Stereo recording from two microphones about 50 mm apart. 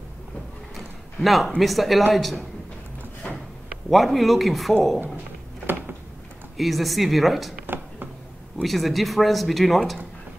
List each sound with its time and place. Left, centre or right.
0.7 s a sound: centre
1.6 s speech: centre
3.9 s speech: centre
6.5 s speech: centre
7.6 s a sound: right
8.6 s speech: centre